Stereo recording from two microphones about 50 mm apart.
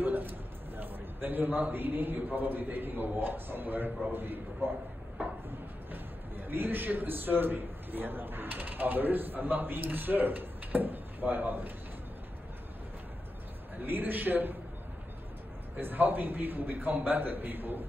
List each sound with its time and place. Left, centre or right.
0.0 s a man's voice: right
5.2 s a sound: right
5.9 s a man's voice: right
13.8 s a man's voice: right
15.8 s a man's voice: right